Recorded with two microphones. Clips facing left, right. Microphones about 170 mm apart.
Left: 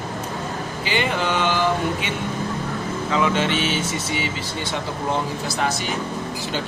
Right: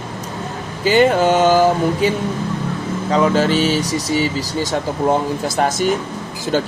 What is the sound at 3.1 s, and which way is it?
Speech, 40° right (ahead or behind).